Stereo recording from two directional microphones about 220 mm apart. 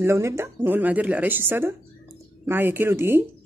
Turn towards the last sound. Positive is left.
turn(degrees=-10)  # may be behind; listen again after turning